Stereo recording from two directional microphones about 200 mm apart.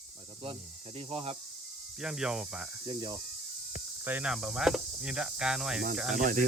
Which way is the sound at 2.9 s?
20° right (ahead or behind).